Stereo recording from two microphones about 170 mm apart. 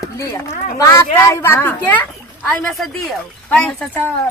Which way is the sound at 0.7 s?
20° left (ahead or behind).